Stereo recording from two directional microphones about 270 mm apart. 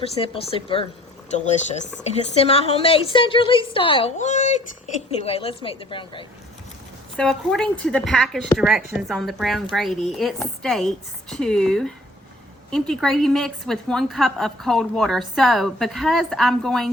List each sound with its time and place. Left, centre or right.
0.0 s speech: left
7.2 s a woman's voice: centre